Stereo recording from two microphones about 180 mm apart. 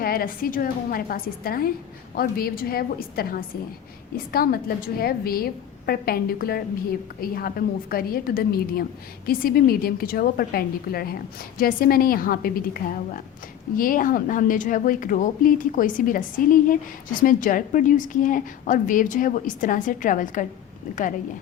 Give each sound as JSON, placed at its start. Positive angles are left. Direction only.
{"t": 0.0, "sound": "a woman's voice", "side_deg": 55}